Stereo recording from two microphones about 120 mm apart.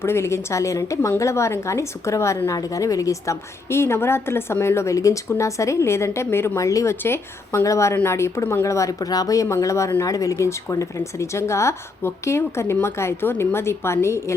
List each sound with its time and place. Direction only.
0.0 s a woman's voice: 20° left (ahead or behind)